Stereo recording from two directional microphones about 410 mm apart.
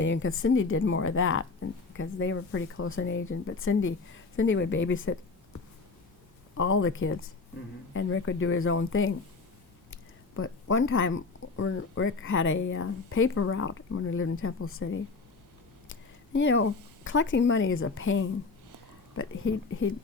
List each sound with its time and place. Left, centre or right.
0.0 s speech: left
6.6 s speech: left